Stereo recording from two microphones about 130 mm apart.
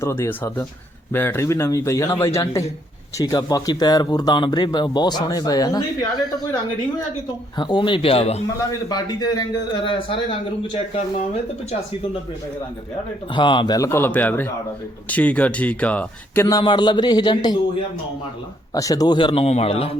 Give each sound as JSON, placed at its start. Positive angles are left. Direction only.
{"t": 0.0, "sound": "a man's voice", "side_deg": 20}
{"t": 7.6, "sound": "speech", "side_deg": 35}
{"t": 8.9, "sound": "speech", "side_deg": 30}
{"t": 13.3, "sound": "speech", "side_deg": 40}
{"t": 13.7, "sound": "speech", "side_deg": 20}
{"t": 16.5, "sound": "speech", "side_deg": 30}
{"t": 18.7, "sound": "speech", "side_deg": 25}